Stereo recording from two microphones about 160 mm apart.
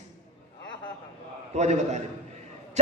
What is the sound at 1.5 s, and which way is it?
Speech, 45° right (ahead or behind).